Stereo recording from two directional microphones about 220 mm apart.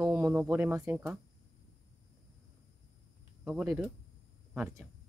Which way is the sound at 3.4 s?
5° right (ahead or behind).